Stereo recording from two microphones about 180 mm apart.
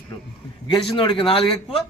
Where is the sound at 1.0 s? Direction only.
30° left (ahead or behind).